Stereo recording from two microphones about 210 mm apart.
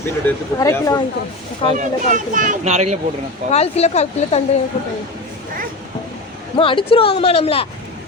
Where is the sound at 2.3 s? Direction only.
40° right (ahead or behind).